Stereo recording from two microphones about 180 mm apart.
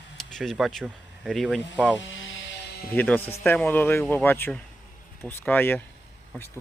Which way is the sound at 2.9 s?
10° left (ahead or behind).